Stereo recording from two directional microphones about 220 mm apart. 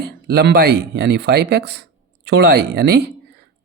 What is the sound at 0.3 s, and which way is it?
Speech, 45° right (ahead or behind).